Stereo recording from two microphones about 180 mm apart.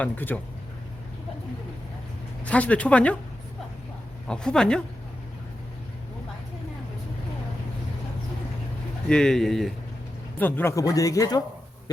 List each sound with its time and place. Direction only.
0.0 s speech: 10° left (ahead or behind)
2.4 s speech: 5° left (ahead or behind)
4.3 s speech: 5° left (ahead or behind)
9.0 s speech: 5° left (ahead or behind); by 11.4 s 20° left (ahead or behind)